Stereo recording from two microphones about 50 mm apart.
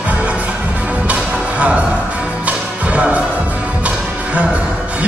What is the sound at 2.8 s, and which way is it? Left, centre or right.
Speech, right.